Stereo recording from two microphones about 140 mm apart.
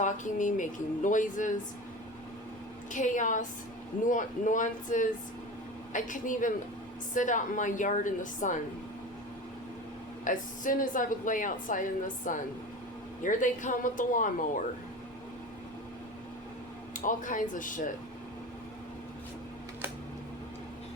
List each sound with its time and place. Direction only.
0.0 s speech: 65° left (ahead or behind)
2.9 s a woman's voice: 65° left (ahead or behind)
10.2 s a woman's voice: 70° left (ahead or behind)
16.9 s a woman's voice: 70° left (ahead or behind)